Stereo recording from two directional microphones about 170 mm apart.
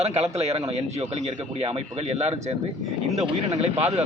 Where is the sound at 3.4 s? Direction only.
40° right (ahead or behind).